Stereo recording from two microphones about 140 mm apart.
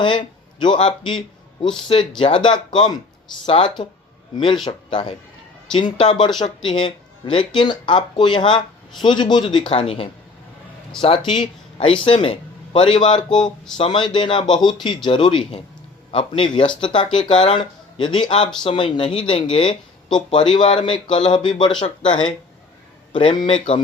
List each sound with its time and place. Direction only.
0.0 s speech: 35° left (ahead or behind)
11.0 s speech: 5° left (ahead or behind)
11.3 s speech: 35° left (ahead or behind)
13.3 s speech: 5° left (ahead or behind)
13.7 s speech: 35° left (ahead or behind)